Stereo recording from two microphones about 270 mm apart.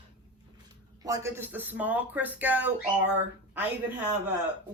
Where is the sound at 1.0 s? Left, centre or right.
Centre.